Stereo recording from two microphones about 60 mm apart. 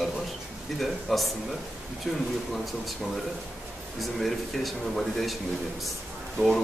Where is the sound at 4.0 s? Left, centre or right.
Centre.